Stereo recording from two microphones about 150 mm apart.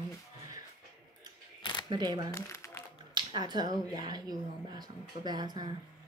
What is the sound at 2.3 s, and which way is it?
Crumpling, 20° left (ahead or behind).